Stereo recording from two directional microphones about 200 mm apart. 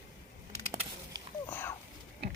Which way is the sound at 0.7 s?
15° right (ahead or behind).